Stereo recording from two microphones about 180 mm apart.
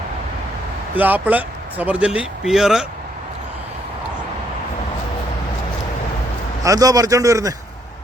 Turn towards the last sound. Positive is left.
turn(degrees=-20)  # may be behind; listen again after turning